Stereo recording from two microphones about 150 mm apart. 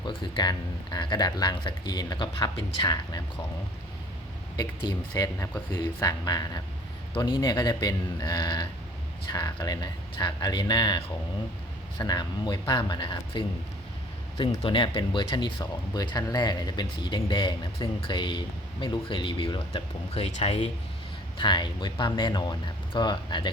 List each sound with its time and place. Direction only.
0.0 s speech: 30° left (ahead or behind)
4.5 s speech: 25° left (ahead or behind); by 20.7 s 45° left (ahead or behind)
21.3 s speech: 30° left (ahead or behind)